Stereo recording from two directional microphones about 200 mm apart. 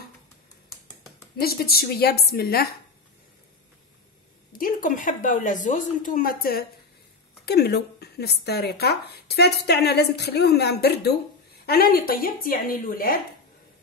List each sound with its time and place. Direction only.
1.4 s speech: 50° left (ahead or behind)
4.5 s a woman's voice: 45° left (ahead or behind)